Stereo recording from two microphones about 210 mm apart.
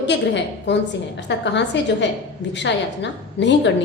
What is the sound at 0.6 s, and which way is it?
A woman's voice, 55° left (ahead or behind).